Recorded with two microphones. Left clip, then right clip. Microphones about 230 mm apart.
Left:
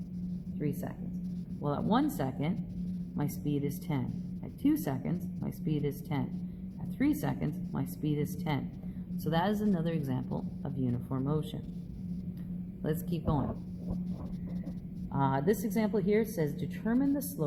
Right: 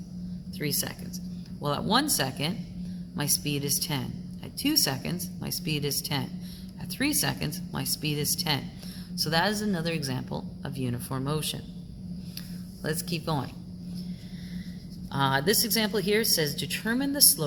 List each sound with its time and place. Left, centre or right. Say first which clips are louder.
1.6 s a woman's voice: right 5 dB; right
12.8 s a woman's voice: right 4 dB; right
15.1 s speech: right 5 dB; right